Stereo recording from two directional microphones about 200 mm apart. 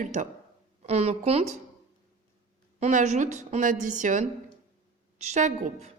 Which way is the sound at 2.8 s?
35° right (ahead or behind).